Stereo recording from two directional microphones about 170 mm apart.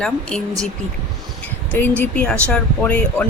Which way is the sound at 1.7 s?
10° left (ahead or behind).